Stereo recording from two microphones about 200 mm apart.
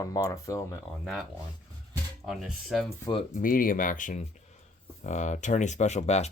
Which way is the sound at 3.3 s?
45° left (ahead or behind).